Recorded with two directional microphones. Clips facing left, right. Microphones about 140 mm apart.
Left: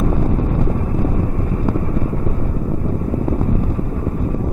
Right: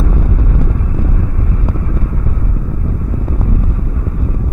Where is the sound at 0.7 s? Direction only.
35° left (ahead or behind).